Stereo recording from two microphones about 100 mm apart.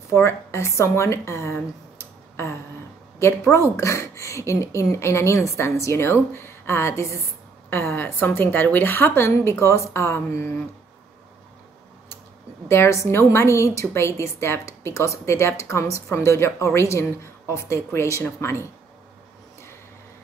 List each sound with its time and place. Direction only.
0.1 s a woman's voice: 30° left (ahead or behind)
12.6 s a woman's voice: 25° left (ahead or behind)